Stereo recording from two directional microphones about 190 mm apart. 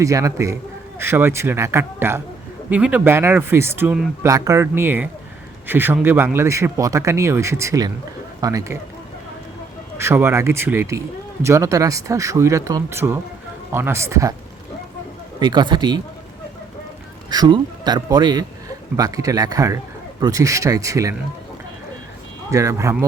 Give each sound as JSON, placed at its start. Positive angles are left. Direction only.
{"t": 0.0, "sound": "speech", "side_deg": -15}
{"t": 10.0, "sound": "speech", "side_deg": -15}
{"t": 15.4, "sound": "speech", "side_deg": -25}
{"t": 17.2, "sound": "speech", "side_deg": -20}
{"t": 22.4, "sound": "speech", "side_deg": -15}